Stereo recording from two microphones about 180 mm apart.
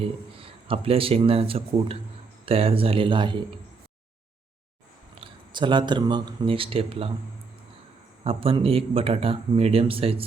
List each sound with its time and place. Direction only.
0.3 s speech: 30° right (ahead or behind)
5.2 s speech: 25° right (ahead or behind)
8.2 s speech: 30° right (ahead or behind)